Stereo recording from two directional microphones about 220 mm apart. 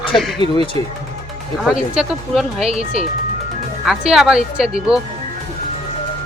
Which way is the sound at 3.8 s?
Centre (ahead or behind).